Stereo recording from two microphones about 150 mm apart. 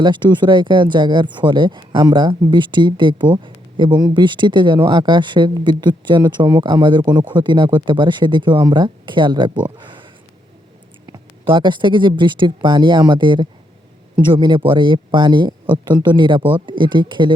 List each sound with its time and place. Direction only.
0.0 s speech: 30° right (ahead or behind)
9.7 s a sound: 35° right (ahead or behind)
11.4 s speech: 35° right (ahead or behind)